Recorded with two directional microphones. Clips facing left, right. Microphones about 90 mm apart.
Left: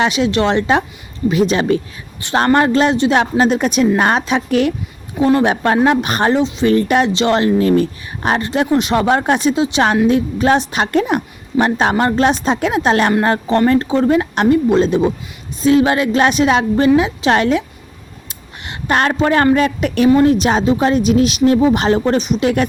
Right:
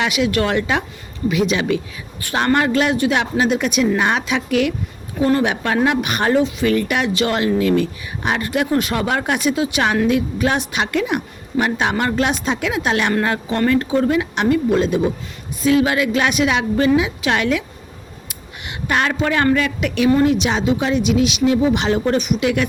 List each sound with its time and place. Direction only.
0.0 s speech: 30° left (ahead or behind)
6.3 s speech: 25° left (ahead or behind)
18.7 s a woman's voice: 40° left (ahead or behind)